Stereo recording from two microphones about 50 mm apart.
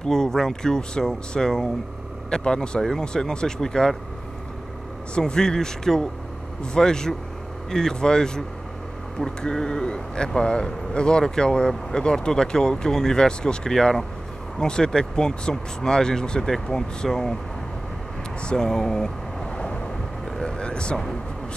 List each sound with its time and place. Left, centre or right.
0.0 s speech: centre
5.1 s speech: centre
18.4 s a sound: centre